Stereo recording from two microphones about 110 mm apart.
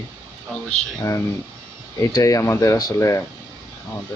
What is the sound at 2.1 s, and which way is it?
Speech, 30° left (ahead or behind).